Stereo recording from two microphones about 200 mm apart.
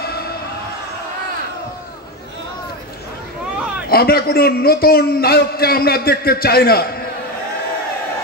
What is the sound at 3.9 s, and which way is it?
A man's voice, 50° left (ahead or behind).